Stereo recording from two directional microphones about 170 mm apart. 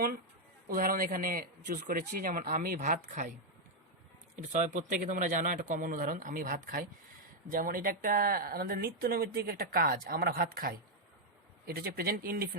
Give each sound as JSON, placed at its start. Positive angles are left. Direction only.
{"t": 0.7, "sound": "speech", "side_deg": -55}
{"t": 4.5, "sound": "speech", "side_deg": -45}